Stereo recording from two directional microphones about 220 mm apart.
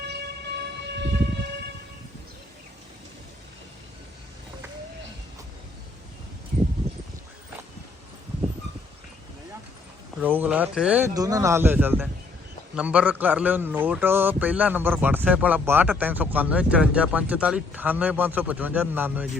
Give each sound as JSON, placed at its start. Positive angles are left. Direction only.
{"t": 0.0, "sound": "train", "side_deg": -50}
{"t": 10.2, "sound": "speech", "side_deg": -10}
{"t": 11.1, "sound": "a man's voice", "side_deg": -15}